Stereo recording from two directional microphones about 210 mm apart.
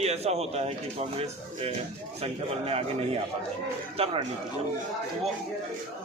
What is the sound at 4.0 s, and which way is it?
Speech, 25° right (ahead or behind).